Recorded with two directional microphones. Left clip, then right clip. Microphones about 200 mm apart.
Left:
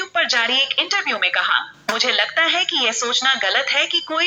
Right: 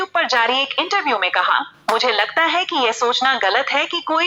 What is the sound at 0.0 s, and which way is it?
A woman's voice, 40° right (ahead or behind).